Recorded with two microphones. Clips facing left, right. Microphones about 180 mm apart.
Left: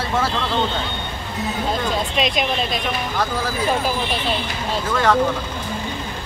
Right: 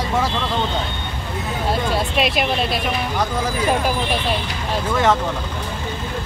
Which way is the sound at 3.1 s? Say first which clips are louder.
Right 1 dB; 15° right (ahead or behind).